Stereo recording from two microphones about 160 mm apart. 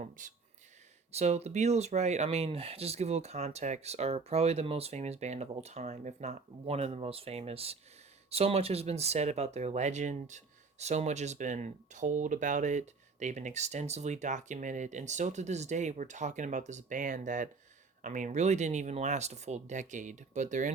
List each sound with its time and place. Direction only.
0.2 s speech: 55° right (ahead or behind)
1.1 s speech: 40° right (ahead or behind)